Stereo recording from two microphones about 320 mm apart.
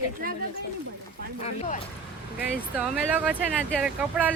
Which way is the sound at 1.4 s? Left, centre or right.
Centre.